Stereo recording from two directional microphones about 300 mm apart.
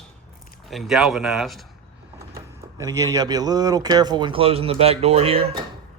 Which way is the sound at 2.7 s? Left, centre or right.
Centre.